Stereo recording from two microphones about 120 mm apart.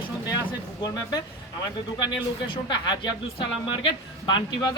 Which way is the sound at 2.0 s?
40° left (ahead or behind).